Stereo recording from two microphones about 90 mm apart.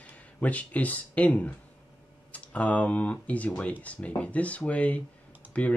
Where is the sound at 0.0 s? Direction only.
15° left (ahead or behind).